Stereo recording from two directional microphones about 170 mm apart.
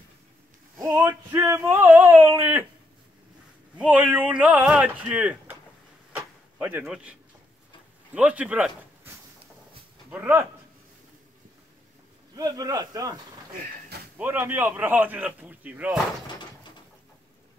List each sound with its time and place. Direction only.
0.7 s a man's voice: 20° right (ahead or behind)
3.7 s a man's voice: 10° right (ahead or behind)
6.1 s door: 10° right (ahead or behind)
8.1 s speech: 10° right (ahead or behind)
12.4 s speech: 20° right (ahead or behind)
14.1 s a man's voice: 10° right (ahead or behind)